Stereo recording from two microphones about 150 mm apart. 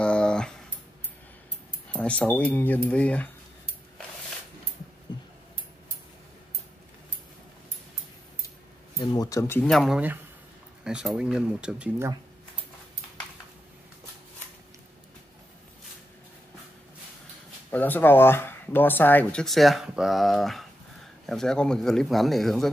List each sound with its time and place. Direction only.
0.0 s a sound: 5° left (ahead or behind)
1.9 s speech: 10° left (ahead or behind)
8.9 s speech: 25° left (ahead or behind)
9.7 s speech: centre (ahead or behind)
17.6 s speech: 10° left (ahead or behind)